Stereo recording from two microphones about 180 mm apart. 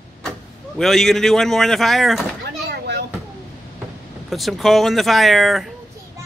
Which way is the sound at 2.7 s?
65° right (ahead or behind).